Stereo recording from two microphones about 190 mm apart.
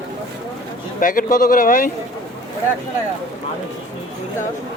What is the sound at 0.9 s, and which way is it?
Speech, 45° left (ahead or behind).